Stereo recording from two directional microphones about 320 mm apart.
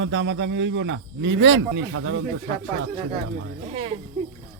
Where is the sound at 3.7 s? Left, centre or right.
Centre.